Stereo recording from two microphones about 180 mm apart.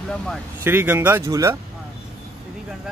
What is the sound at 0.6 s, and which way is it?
Speech, 10° right (ahead or behind).